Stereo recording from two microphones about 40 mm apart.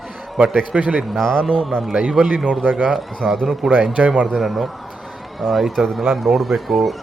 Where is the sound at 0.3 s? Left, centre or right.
Right.